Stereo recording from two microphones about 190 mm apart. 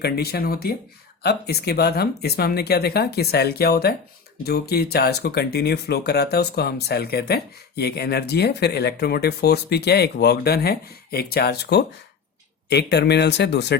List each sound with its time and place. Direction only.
0.0 s speech: 55° left (ahead or behind)